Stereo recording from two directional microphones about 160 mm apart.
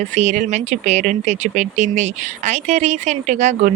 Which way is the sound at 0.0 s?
45° right (ahead or behind).